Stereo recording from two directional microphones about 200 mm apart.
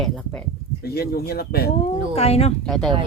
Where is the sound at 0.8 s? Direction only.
50° left (ahead or behind).